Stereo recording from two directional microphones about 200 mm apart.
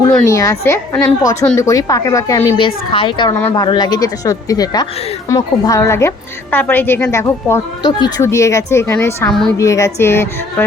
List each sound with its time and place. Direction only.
0.3 s a woman's voice: 15° left (ahead or behind)
2.6 s a woman's voice: 25° left (ahead or behind)